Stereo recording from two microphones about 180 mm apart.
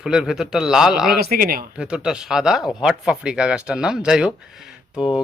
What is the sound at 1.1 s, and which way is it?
Speech, 60° right (ahead or behind).